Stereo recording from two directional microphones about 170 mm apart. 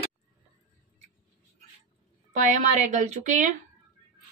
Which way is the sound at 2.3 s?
45° right (ahead or behind).